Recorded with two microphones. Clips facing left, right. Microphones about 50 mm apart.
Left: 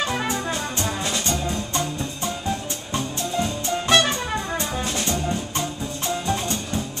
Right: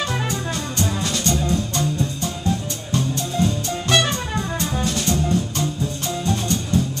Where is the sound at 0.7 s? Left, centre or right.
Centre.